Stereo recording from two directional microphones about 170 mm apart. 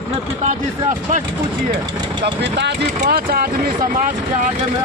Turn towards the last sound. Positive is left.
turn(degrees=-60)  # may be behind; listen again after turning